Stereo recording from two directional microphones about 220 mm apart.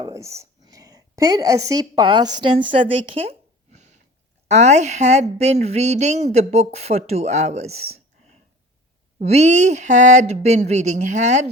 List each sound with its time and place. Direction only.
0.0 s a woman's voice: 15° right (ahead or behind)
4.4 s speech: 30° right (ahead or behind)